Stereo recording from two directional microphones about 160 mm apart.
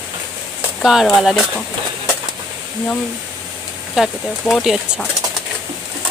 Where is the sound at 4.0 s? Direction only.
Centre (ahead or behind).